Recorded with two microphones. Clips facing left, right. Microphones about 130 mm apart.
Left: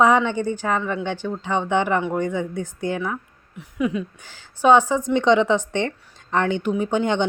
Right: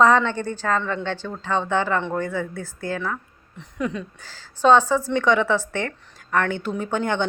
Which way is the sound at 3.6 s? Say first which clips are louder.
Left 4 dB; 10° left (ahead or behind).